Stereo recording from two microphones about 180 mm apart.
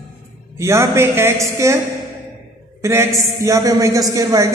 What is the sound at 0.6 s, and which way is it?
A woman's voice, 15° right (ahead or behind).